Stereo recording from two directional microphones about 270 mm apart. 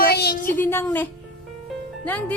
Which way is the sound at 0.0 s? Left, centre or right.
Left.